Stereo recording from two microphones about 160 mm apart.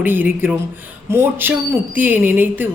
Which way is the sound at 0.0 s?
10° right (ahead or behind).